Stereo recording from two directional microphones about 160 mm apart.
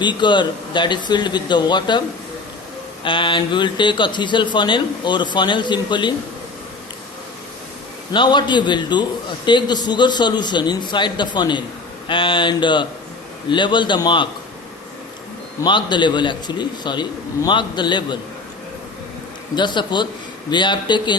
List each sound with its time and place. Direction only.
0.0 s speech: 30° left (ahead or behind)
8.1 s speech: 30° left (ahead or behind)
15.6 s speech: 30° left (ahead or behind)
19.5 s speech: 30° left (ahead or behind)